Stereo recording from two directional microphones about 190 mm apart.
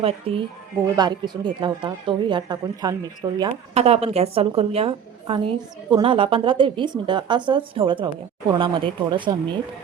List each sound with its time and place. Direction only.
0.0 s a woman's voice: 30° right (ahead or behind)
3.8 s a woman's voice: 35° right (ahead or behind)